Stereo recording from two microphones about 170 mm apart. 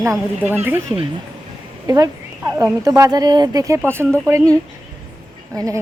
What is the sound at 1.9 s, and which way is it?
Speech, 20° right (ahead or behind).